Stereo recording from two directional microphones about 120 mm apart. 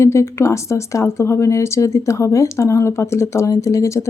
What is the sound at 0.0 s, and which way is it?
Speech, 20° left (ahead or behind).